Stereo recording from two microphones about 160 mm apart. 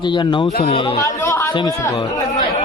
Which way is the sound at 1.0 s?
20° left (ahead or behind).